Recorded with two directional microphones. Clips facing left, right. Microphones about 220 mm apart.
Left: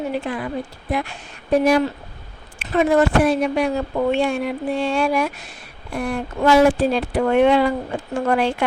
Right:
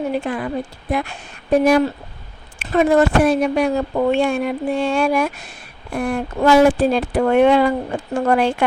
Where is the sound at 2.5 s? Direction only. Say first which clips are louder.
Right 2 dB; 45° right (ahead or behind).